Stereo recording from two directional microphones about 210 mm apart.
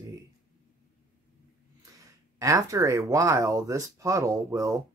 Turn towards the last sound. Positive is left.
turn(degrees=-15)  # may be behind; listen again after turning